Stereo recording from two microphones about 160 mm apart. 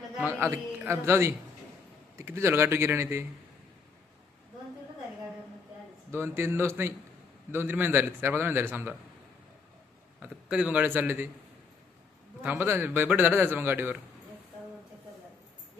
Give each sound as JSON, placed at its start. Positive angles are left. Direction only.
{"t": 0.2, "sound": "a man's voice", "side_deg": -10}
{"t": 6.1, "sound": "a man's voice", "side_deg": -15}
{"t": 10.2, "sound": "a man's voice", "side_deg": -10}
{"t": 12.4, "sound": "a man's voice", "side_deg": -10}